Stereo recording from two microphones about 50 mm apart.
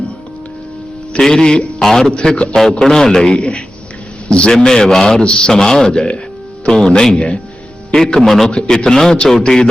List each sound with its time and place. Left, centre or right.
1.1 s a man's voice: centre
2.1 s a man's voice: left
7.9 s music: centre
8.4 s a man's voice: centre